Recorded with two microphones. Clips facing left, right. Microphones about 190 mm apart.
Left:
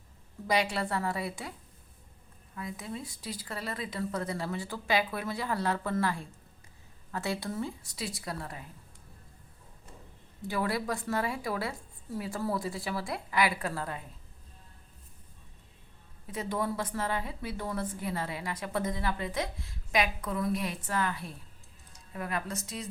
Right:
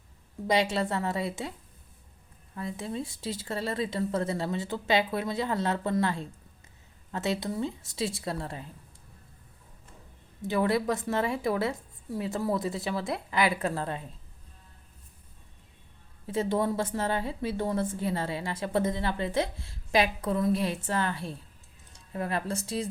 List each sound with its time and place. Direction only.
0.4 s speech: 25° right (ahead or behind)
2.6 s speech: 30° right (ahead or behind)
10.4 s speech: 25° right (ahead or behind)
16.2 s speech: 30° right (ahead or behind)